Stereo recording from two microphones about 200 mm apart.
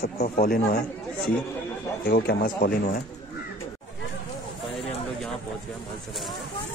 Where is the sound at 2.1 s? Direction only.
50° left (ahead or behind).